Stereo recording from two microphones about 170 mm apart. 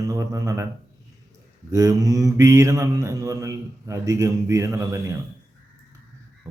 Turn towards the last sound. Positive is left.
turn(degrees=-15)  # may be behind; listen again after turning